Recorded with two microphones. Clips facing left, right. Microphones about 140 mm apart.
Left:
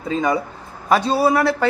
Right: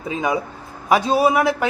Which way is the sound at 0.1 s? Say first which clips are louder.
Left 2 dB; 10° right (ahead or behind).